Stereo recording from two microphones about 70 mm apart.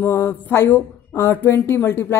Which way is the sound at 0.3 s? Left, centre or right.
Left.